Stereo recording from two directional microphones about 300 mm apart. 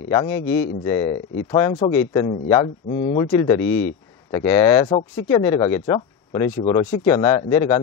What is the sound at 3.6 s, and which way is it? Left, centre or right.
Speech, left.